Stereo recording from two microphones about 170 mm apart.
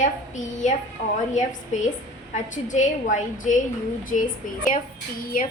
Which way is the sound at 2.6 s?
45° left (ahead or behind).